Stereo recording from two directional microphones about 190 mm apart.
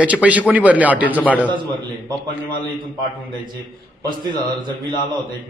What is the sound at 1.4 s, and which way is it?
Speech, 25° right (ahead or behind).